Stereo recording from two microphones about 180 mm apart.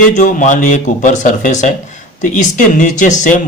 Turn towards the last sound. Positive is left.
turn(degrees=45)  # may be behind; listen again after turning